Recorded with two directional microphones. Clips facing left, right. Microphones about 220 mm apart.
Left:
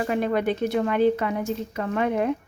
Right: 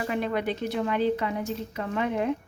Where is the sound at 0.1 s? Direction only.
45° left (ahead or behind).